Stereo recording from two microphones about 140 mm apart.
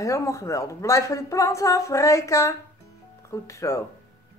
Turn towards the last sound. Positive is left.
turn(degrees=20)  # may be behind; listen again after turning